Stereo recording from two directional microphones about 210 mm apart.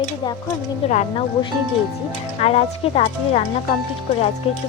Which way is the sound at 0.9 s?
35° left (ahead or behind).